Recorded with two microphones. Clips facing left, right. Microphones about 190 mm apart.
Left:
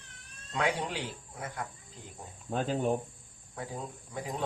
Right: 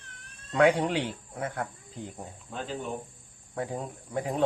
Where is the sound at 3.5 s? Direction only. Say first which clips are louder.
Right 6 dB; 60° right (ahead or behind).